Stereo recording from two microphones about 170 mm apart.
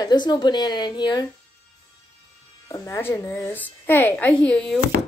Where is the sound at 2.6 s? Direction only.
15° left (ahead or behind).